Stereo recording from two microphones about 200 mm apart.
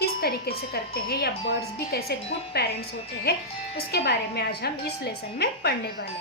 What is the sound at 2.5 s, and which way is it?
A woman's voice, 50° left (ahead or behind).